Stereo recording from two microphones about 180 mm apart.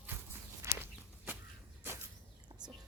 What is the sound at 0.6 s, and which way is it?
Walk, 10° right (ahead or behind).